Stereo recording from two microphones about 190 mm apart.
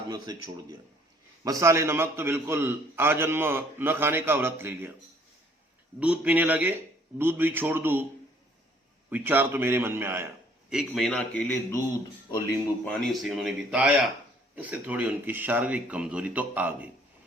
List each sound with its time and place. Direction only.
0.1 s a man's voice: 20° right (ahead or behind)
6.0 s a man's voice: 5° right (ahead or behind)
9.0 s a man's voice: 10° right (ahead or behind)
10.7 s speech: centre (ahead or behind)
12.8 s a man's voice: centre (ahead or behind)